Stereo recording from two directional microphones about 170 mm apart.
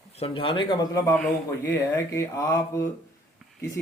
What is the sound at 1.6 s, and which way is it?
Speech, 15° left (ahead or behind).